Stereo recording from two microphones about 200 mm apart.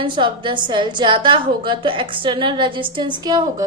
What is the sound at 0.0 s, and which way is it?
A woman's voice, 25° right (ahead or behind).